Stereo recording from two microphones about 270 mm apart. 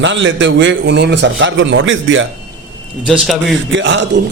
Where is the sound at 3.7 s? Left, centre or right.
Right.